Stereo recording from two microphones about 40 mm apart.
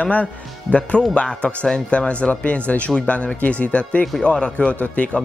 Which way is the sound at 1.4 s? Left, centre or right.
Left.